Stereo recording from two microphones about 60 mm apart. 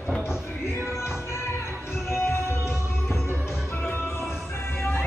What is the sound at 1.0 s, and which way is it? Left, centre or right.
Music, left.